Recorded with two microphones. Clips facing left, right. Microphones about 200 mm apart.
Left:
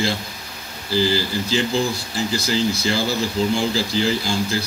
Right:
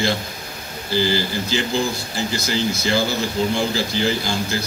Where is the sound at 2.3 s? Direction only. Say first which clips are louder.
Left 2 dB; 30° left (ahead or behind).